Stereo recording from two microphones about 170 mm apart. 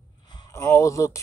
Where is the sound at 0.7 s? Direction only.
20° left (ahead or behind).